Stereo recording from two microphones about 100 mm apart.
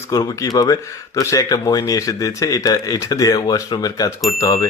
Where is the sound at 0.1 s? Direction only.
40° left (ahead or behind).